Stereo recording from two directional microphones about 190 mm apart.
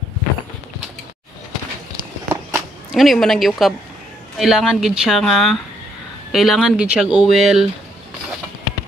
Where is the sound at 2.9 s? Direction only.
Centre (ahead or behind).